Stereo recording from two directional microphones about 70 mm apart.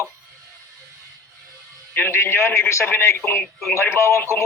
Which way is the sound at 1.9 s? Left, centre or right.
Left.